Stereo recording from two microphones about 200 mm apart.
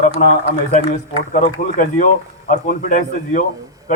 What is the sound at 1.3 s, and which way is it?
A man's voice, 40° left (ahead or behind).